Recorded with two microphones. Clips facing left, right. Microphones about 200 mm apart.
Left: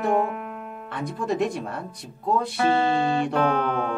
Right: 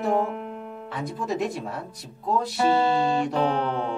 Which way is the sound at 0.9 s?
Centre (ahead or behind).